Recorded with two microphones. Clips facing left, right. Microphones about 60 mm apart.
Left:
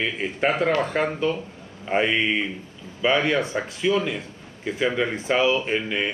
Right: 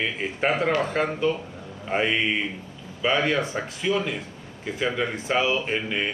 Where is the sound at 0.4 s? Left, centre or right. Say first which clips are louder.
Left 2 dB; centre.